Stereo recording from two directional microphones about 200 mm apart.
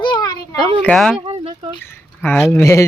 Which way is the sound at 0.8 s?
5° left (ahead or behind).